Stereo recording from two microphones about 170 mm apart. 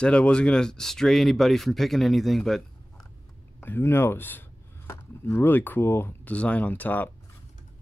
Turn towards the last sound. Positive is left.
turn(degrees=10)  # may be behind; listen again after turning